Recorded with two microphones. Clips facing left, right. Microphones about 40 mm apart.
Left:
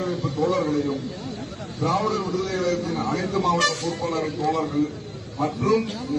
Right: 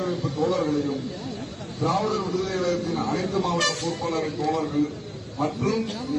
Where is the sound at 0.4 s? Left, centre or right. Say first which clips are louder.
Left 1 dB; left.